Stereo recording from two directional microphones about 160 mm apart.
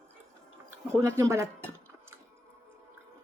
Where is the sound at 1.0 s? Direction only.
20° right (ahead or behind).